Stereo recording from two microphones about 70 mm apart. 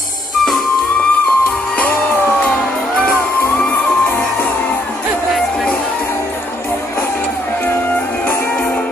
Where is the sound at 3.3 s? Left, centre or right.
Left.